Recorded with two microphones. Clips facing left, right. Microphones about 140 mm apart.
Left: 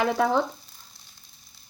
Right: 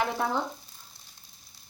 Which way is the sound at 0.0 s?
90° left.